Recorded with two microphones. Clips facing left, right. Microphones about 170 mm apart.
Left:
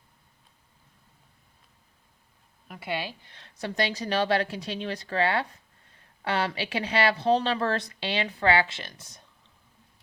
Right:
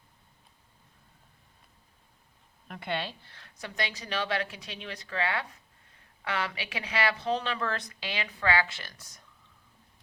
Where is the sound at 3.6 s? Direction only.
35° left (ahead or behind).